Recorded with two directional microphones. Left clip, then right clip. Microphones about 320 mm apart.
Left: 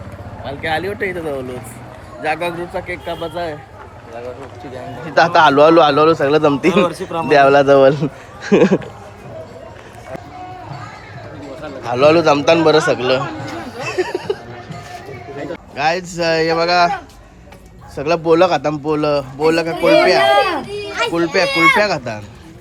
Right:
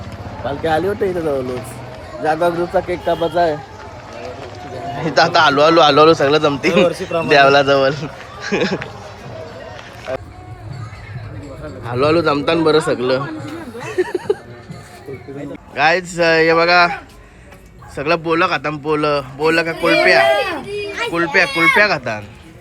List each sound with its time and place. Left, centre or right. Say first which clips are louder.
0.6 s speech: right 2 dB; centre
2.3 s speech: right 6 dB; centre
5.1 s a man's voice: left 2 dB; centre
11.9 s a man's voice: left 4 dB; centre
13.7 s a sound: even; centre
15.7 s a man's voice: right 3 dB; centre
19.7 s a man's voice: left 1 dB; centre